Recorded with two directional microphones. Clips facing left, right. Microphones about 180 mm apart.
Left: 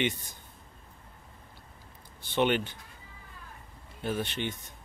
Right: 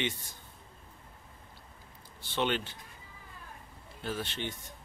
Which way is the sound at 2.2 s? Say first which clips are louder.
Left 5 dB; 15° left (ahead or behind).